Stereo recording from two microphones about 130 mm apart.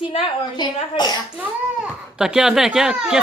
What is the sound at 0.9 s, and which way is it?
Speech, 35° left (ahead or behind).